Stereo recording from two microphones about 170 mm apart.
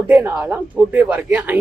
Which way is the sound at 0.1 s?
10° right (ahead or behind).